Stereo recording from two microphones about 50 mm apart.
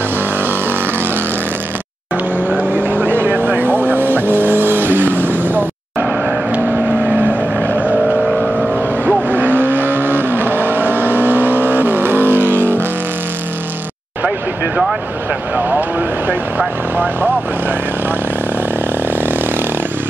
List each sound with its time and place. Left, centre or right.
2.7 s vehicle: right
5.9 s vehicle: right
8.3 s vehicle: centre
9.0 s vehicle: right
16.3 s vehicle: right